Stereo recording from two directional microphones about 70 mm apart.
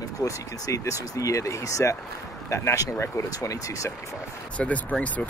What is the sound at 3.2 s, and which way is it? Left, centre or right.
Speech, left.